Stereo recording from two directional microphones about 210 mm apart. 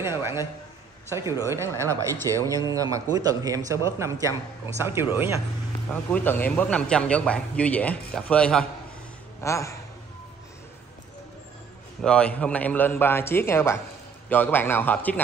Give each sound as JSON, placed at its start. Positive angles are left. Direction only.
{"t": 0.0, "sound": "speech", "side_deg": -10}
{"t": 5.9, "sound": "a man's voice", "side_deg": 10}
{"t": 12.0, "sound": "a man's voice", "side_deg": 5}